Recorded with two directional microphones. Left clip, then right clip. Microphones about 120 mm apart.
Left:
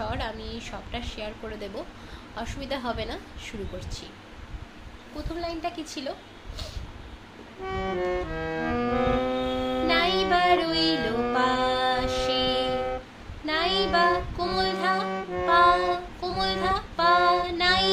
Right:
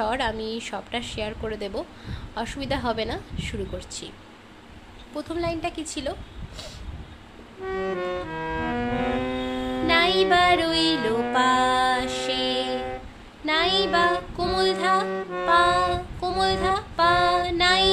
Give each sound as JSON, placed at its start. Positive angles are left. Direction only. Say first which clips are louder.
{"t": 0.0, "sound": "a woman's voice", "louder": "right 7 dB", "side_deg": -65}
{"t": 5.1, "sound": "a woman's voice", "louder": "right 5 dB", "side_deg": -65}
{"t": 7.7, "sound": "music", "louder": "even", "side_deg": -40}